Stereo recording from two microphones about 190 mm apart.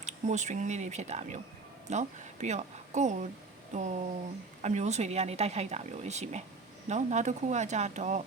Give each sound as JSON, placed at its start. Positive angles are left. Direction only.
{"t": 0.0, "sound": "a woman's voice", "side_deg": -40}